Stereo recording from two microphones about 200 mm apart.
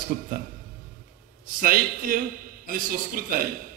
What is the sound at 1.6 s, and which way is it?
A man's voice, 45° right (ahead or behind).